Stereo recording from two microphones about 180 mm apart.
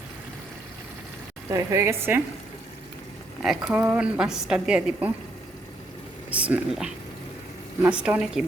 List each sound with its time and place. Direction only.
1.5 s a woman's voice: 15° right (ahead or behind)
3.4 s a woman's voice: 5° right (ahead or behind)
6.4 s a woman's voice: 5° right (ahead or behind)